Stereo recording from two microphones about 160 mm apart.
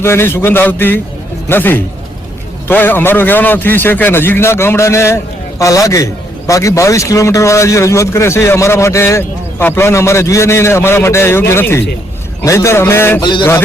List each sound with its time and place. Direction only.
0.0 s speech: 15° left (ahead or behind)